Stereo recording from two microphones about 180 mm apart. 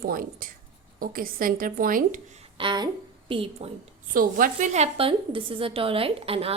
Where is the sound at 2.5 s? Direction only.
25° right (ahead or behind).